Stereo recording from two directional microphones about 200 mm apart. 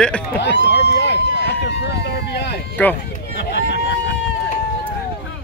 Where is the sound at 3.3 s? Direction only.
60° left (ahead or behind).